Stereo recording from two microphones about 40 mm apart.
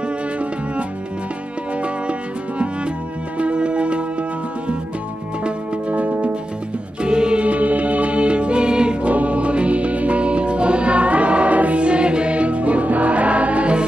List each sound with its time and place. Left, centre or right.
3.3 s music: right
5.4 s music: right
7.0 s music: right
9.1 s music: right